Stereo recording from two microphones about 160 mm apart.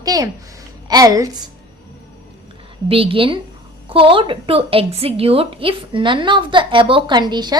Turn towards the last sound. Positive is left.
turn(degrees=-25)  # may be behind; listen again after turning